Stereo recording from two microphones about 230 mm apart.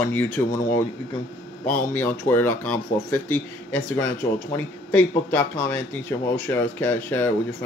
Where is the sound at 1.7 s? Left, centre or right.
Centre.